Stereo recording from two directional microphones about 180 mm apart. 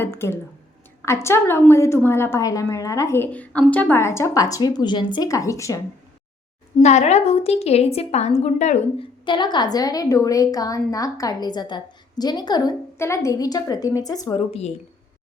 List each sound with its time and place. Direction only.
0.0 s a woman's voice: 15° left (ahead or behind)
6.8 s a woman's voice: 40° left (ahead or behind)
9.2 s a woman's voice: 25° left (ahead or behind)